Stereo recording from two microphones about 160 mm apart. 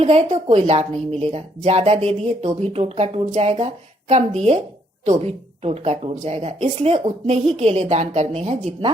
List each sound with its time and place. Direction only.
0.0 s a woman's voice: 45° right (ahead or behind)